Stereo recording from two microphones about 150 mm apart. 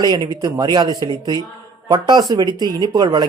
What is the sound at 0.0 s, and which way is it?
Speech, 25° right (ahead or behind).